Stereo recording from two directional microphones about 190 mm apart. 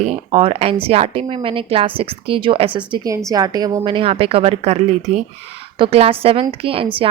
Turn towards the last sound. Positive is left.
turn(degrees=-30)  # may be behind; listen again after turning